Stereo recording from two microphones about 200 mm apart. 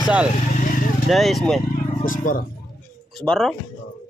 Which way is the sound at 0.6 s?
40° left (ahead or behind).